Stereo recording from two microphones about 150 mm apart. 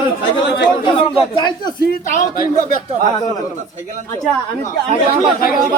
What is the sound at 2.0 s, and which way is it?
Speech, 65° left (ahead or behind).